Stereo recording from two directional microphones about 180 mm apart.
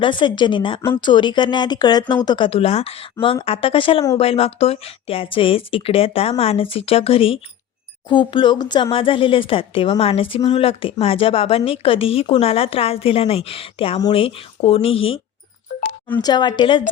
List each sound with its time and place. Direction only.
0.0 s speech: 25° left (ahead or behind)
16.2 s speech: 25° left (ahead or behind)